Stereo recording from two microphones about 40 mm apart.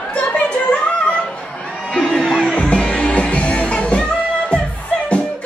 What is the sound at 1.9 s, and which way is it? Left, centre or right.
Music, left.